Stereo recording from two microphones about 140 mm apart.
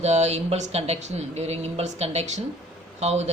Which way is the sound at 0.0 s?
50° right (ahead or behind).